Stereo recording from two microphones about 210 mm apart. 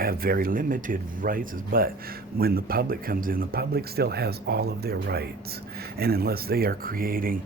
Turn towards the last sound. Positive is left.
turn(degrees=-45)  # may be behind; listen again after turning